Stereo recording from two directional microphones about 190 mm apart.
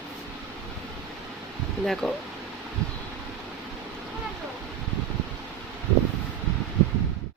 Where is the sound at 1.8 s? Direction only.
Centre (ahead or behind).